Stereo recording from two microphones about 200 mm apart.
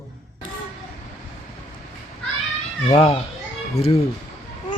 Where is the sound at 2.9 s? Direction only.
30° left (ahead or behind).